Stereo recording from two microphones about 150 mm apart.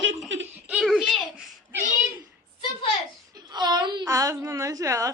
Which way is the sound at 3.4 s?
30° right (ahead or behind).